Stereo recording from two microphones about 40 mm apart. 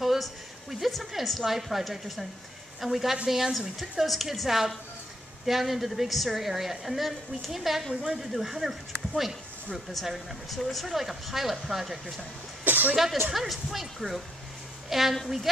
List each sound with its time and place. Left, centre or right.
0.0 s a woman's voice: centre
7.9 s speech: right
8.2 s a woman's voice: centre
12.6 s music: right
12.9 s a woman's voice: centre